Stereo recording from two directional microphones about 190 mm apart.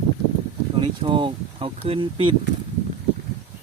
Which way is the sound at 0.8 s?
25° right (ahead or behind).